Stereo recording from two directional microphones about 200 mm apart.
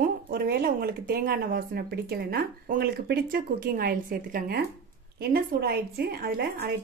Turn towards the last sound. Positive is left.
turn(degrees=-50)  # may be behind; listen again after turning